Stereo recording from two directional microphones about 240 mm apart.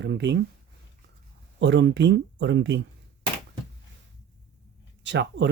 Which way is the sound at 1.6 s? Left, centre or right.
Right.